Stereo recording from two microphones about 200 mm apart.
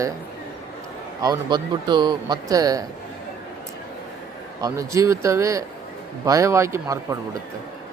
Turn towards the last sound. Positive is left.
turn(degrees=-15)  # may be behind; listen again after turning